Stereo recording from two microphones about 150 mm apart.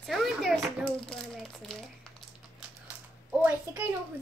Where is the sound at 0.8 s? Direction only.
5° left (ahead or behind).